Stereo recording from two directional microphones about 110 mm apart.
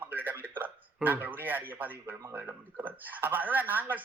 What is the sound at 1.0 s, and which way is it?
Speech, 15° right (ahead or behind).